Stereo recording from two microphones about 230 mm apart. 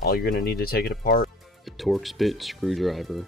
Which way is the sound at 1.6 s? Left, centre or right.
Centre.